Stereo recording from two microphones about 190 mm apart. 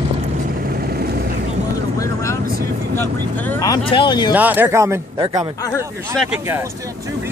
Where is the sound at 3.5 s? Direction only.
20° left (ahead or behind).